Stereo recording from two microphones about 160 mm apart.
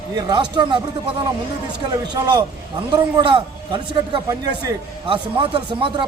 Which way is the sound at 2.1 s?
25° right (ahead or behind).